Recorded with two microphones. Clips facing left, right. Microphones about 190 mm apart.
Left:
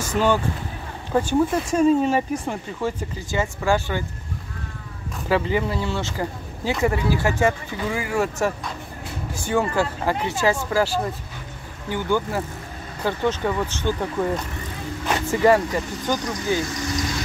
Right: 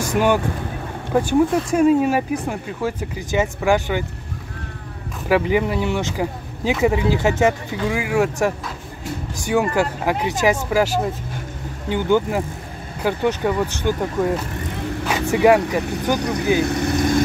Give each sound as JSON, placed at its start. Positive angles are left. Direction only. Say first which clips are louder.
{"t": 0.0, "sound": "speech", "louder": "right 3 dB", "side_deg": -15}
{"t": 3.3, "sound": "speech", "louder": "right 4 dB", "side_deg": -15}
{"t": 5.3, "sound": "speech", "louder": "right 4 dB", "side_deg": -15}
{"t": 15.4, "sound": "speech", "louder": "right 3 dB", "side_deg": -10}
{"t": 16.2, "sound": "speech", "louder": "right 5 dB", "side_deg": -65}